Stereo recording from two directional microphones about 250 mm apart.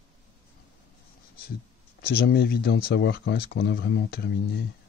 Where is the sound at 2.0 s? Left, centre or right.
Left.